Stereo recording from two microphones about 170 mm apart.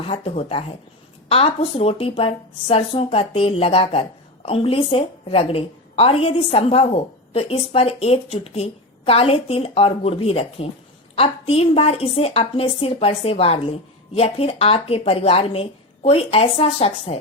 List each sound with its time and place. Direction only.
0.1 s a woman's voice: 35° left (ahead or behind)